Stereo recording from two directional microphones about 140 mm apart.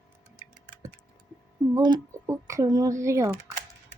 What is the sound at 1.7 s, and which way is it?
Speech, 25° right (ahead or behind).